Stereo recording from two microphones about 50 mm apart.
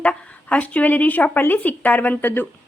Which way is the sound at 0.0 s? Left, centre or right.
Left.